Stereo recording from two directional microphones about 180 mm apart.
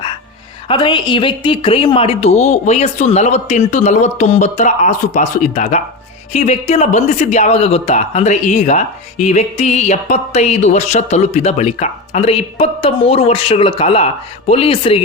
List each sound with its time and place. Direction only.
0.7 s speech: 25° left (ahead or behind)